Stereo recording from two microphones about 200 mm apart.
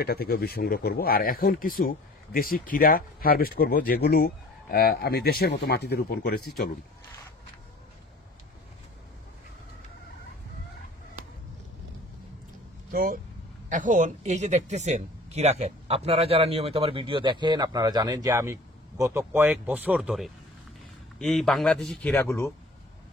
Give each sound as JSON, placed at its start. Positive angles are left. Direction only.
{"t": 0.0, "sound": "speech", "side_deg": 50}
{"t": 12.9, "sound": "speech", "side_deg": -45}